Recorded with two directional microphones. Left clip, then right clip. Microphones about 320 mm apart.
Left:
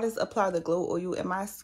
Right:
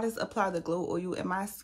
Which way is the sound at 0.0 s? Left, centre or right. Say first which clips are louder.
Left 3 dB; centre.